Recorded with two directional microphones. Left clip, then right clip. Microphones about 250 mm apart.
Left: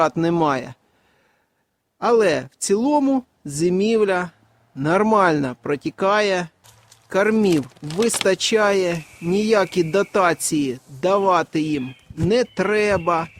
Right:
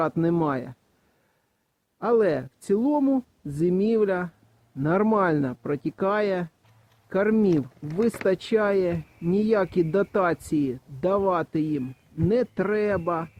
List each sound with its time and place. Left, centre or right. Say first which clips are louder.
0.0 s speech: left 6 dB; centre
2.0 s speech: left 5 dB; centre